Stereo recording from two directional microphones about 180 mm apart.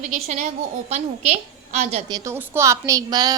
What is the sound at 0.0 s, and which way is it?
A woman's voice, 40° right (ahead or behind).